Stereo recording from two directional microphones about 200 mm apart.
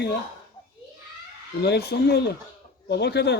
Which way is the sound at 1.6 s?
55° left (ahead or behind).